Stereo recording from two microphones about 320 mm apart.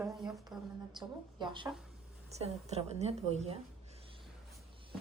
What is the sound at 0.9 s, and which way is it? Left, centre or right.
A woman's voice, centre.